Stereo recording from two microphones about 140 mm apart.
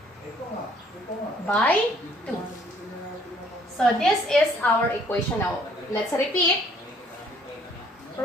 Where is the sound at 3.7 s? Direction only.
5° left (ahead or behind).